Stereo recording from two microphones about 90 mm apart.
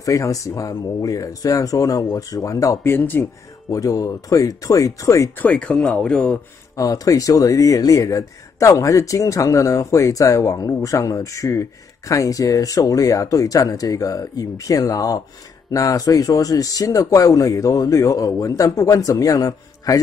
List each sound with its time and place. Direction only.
0.0 s speech: 40° left (ahead or behind)
2.8 s speech: 20° left (ahead or behind)
3.7 s speech: 40° left (ahead or behind)
5.4 s speech: 15° left (ahead or behind)
6.8 s speech: 40° left (ahead or behind)